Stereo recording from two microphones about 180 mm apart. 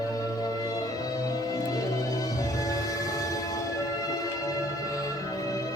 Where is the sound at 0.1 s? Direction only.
20° left (ahead or behind).